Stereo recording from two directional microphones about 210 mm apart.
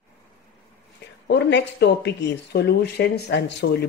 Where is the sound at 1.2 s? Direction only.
55° left (ahead or behind).